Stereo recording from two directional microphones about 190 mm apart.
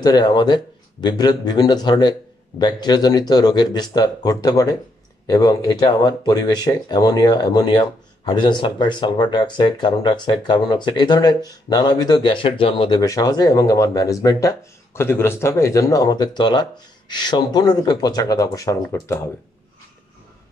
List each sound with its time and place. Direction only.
0.0 s speech: 20° left (ahead or behind)